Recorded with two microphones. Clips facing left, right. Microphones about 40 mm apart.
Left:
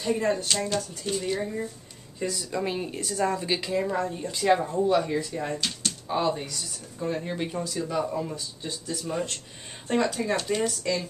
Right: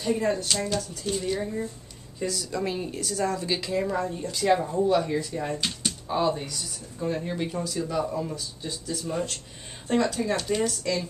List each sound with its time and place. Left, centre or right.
0.0 s a woman's voice: centre
5.6 s a sound: centre
6.0 s a woman's voice: centre
9.9 s a woman's voice: centre